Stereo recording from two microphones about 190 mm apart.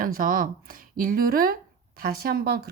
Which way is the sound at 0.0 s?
45° right (ahead or behind).